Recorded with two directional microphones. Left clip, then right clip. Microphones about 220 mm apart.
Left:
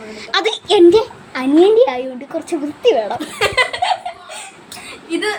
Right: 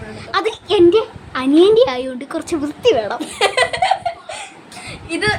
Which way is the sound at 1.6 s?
Centre (ahead or behind).